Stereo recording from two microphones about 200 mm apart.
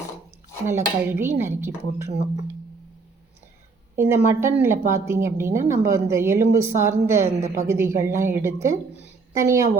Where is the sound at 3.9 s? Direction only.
10° right (ahead or behind).